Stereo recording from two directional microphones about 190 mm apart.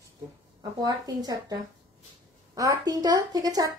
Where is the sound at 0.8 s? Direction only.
20° right (ahead or behind).